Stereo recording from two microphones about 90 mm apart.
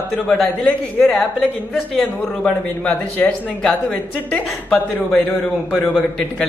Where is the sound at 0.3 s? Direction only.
10° left (ahead or behind).